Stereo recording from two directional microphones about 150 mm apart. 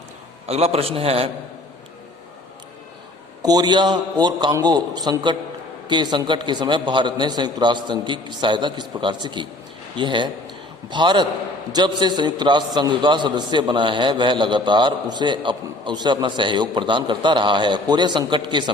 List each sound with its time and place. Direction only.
0.4 s a man's voice: 45° right (ahead or behind)
3.4 s a man's voice: 25° right (ahead or behind)